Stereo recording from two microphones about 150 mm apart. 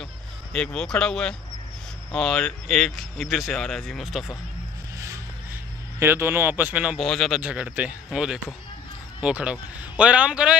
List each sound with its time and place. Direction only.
0.0 s a sound: 5° left (ahead or behind)
2.1 s speech: 5° left (ahead or behind)
4.9 s music: 20° right (ahead or behind)
5.9 s speech: 15° right (ahead or behind)